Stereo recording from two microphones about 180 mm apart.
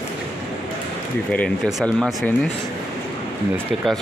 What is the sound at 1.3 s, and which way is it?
Speech, 5° left (ahead or behind).